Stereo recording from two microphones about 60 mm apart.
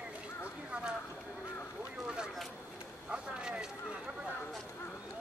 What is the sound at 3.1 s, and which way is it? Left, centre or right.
Vehicle, centre.